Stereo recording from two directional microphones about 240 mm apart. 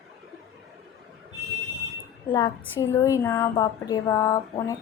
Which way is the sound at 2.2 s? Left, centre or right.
Centre.